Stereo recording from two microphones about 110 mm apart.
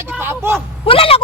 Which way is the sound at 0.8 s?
55° left (ahead or behind).